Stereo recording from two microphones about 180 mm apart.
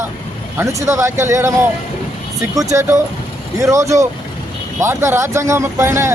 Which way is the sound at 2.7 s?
15° right (ahead or behind).